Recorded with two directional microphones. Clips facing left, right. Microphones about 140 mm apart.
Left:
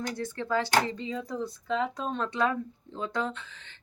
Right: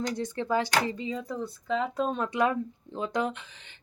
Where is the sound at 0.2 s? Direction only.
20° right (ahead or behind).